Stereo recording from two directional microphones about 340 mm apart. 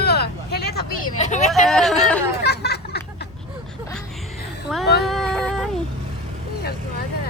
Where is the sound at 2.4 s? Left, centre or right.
Left.